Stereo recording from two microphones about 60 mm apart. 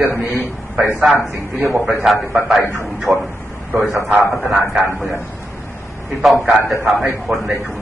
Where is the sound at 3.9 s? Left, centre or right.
Centre.